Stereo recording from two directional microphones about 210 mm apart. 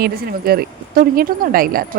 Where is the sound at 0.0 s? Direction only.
45° right (ahead or behind).